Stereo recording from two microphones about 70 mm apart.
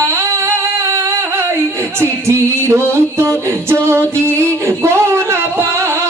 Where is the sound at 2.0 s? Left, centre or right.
Right.